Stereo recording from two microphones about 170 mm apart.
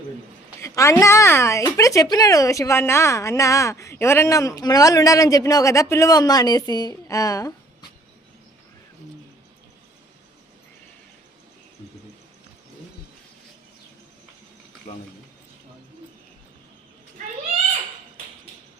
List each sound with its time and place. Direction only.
0.6 s speech: 15° left (ahead or behind)